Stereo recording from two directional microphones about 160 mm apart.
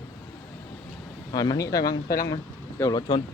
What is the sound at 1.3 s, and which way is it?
Speech, 25° left (ahead or behind).